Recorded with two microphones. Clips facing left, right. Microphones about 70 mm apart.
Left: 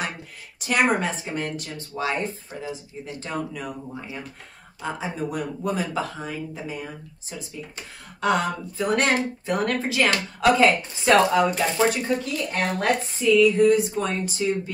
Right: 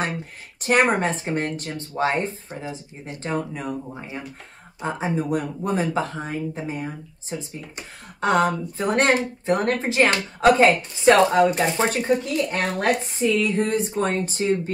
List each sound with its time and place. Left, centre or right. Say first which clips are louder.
0.0 s speech: right 4 dB; right